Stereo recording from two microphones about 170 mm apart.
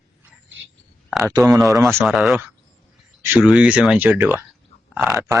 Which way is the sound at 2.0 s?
Centre (ahead or behind).